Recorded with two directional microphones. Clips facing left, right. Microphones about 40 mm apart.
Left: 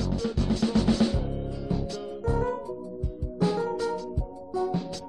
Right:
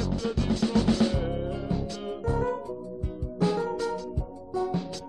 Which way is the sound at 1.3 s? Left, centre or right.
Right.